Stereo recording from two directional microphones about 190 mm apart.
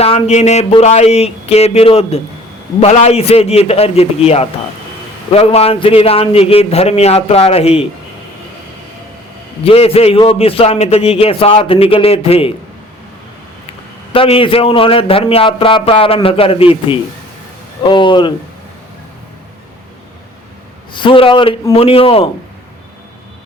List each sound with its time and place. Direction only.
0.0 s a man's voice: 35° left (ahead or behind)
9.6 s a man's voice: 30° left (ahead or behind)
14.1 s a man's voice: 30° left (ahead or behind)
20.9 s a man's voice: 25° left (ahead or behind)